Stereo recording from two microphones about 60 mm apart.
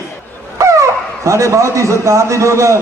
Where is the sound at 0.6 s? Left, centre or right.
Right.